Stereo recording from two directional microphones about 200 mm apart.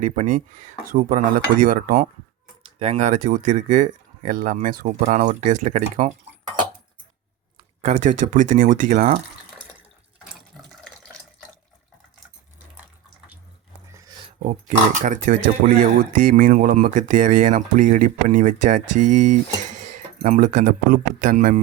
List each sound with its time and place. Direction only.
0.0 s speech: 40° right (ahead or behind)
2.6 s speech: 30° right (ahead or behind)
7.8 s speech: 35° right (ahead or behind)
10.6 s water: centre (ahead or behind)
14.4 s speech: 40° right (ahead or behind)